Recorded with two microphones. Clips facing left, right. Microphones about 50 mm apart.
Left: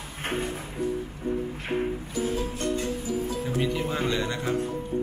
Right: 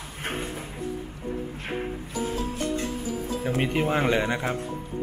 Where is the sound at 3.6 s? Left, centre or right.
Right.